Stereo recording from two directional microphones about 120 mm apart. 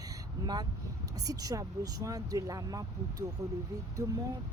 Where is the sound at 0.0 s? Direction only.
35° right (ahead or behind).